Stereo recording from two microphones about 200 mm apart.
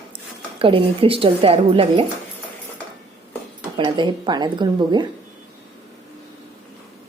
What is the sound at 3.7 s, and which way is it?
A woman's voice, 25° right (ahead or behind).